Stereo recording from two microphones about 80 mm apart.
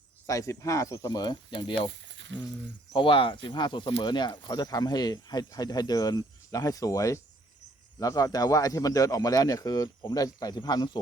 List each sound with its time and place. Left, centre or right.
0.3 s a man's voice: left
2.9 s a man's voice: left